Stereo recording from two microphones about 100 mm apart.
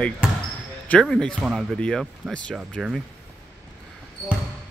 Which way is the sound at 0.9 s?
10° left (ahead or behind).